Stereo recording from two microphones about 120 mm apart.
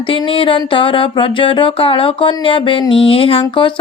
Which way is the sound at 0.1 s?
50° left (ahead or behind).